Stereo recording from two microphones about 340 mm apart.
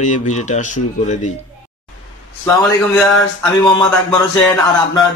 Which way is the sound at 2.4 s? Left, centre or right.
Centre.